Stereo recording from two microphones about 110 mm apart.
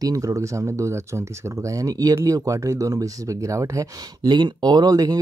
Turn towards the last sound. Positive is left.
turn(degrees=-35)  # may be behind; listen again after turning